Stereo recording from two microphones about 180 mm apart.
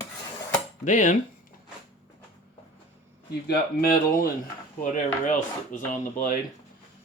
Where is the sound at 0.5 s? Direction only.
45° left (ahead or behind).